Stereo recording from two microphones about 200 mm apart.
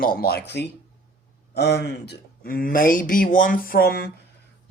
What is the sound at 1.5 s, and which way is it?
Speech, 55° left (ahead or behind).